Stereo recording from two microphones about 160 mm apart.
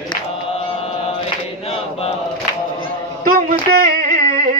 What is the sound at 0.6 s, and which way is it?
Chant, 35° left (ahead or behind).